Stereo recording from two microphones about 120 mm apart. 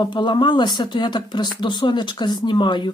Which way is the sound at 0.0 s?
40° left (ahead or behind).